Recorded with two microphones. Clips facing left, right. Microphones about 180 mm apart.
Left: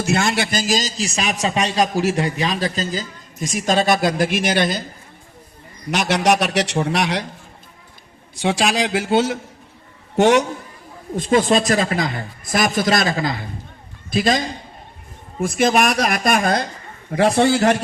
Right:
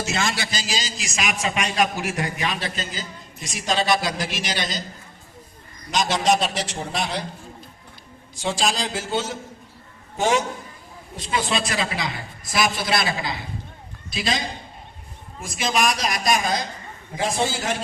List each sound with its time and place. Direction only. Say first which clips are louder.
0.0 s a man's voice: left 6 dB; 60° left (ahead or behind); by 3.0 s 40° left (ahead or behind)
3.4 s a man's voice: left 6 dB; 50° left (ahead or behind)
5.9 s a man's voice: left 3 dB; 65° left (ahead or behind)
8.4 s a man's voice: left 5 dB; 65° left (ahead or behind)
11.2 s a man's voice: left 9 dB; 45° left (ahead or behind); by 17.8 s 65° left (ahead or behind)